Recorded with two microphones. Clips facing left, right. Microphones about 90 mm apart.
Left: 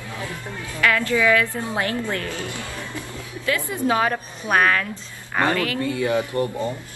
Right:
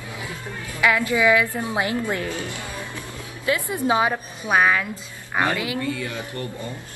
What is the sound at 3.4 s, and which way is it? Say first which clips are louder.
A woman's voice: even; 20° right (ahead or behind).